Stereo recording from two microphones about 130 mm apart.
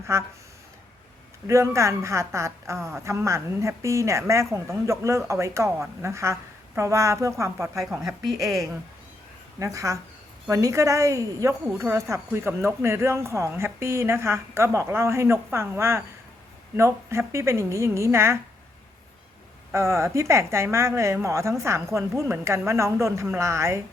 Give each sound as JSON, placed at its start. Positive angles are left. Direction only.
{"t": 0.1, "sound": "a woman's voice", "side_deg": -20}
{"t": 1.5, "sound": "a woman's voice", "side_deg": -20}
{"t": 9.6, "sound": "a woman's voice", "side_deg": -25}
{"t": 19.7, "sound": "a woman's voice", "side_deg": -20}